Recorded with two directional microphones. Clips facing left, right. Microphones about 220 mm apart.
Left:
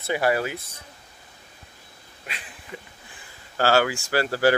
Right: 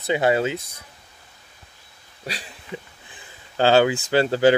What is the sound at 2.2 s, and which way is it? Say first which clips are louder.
Speech: right 7 dB; 35° right (ahead or behind).